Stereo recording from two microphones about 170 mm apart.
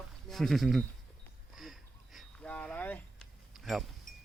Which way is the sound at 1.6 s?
Centre (ahead or behind).